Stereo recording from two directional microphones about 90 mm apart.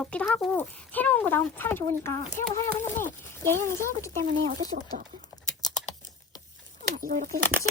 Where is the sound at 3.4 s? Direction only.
30° left (ahead or behind).